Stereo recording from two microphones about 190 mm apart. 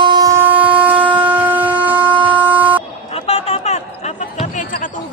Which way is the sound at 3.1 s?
30° left (ahead or behind).